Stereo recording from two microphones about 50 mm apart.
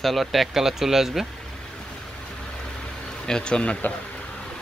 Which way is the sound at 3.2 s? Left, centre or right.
Centre.